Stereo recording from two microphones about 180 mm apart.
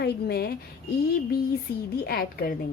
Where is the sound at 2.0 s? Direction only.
55° left (ahead or behind).